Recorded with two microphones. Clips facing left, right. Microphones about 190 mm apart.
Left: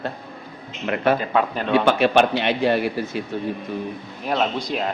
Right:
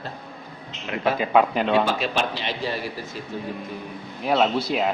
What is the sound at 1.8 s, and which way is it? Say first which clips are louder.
Speech: left 7 dB; 65° left (ahead or behind).